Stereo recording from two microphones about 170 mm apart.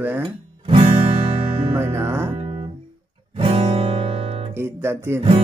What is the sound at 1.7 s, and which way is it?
Speech, 15° right (ahead or behind).